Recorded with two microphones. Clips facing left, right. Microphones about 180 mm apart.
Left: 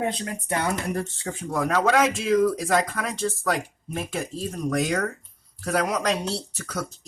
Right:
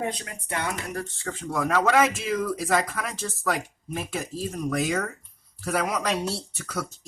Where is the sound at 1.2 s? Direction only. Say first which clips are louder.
Left 2 dB; 15° left (ahead or behind).